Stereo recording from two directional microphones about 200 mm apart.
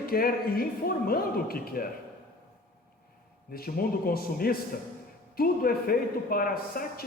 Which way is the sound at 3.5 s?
50° left (ahead or behind).